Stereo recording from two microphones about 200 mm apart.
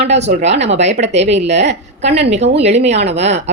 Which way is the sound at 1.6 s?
35° right (ahead or behind).